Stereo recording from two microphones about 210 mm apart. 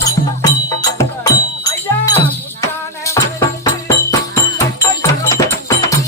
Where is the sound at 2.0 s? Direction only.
15° left (ahead or behind).